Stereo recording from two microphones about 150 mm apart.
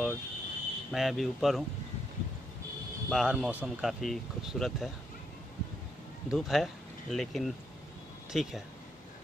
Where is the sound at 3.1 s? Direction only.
Centre (ahead or behind).